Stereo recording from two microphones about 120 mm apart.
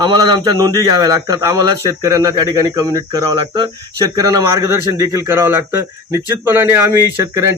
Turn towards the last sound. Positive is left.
turn(degrees=-25)  # may be behind; listen again after turning